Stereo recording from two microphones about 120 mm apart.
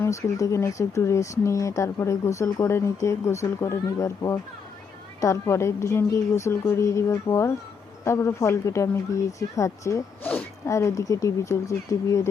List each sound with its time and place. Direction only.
0.0 s speech: 25° left (ahead or behind)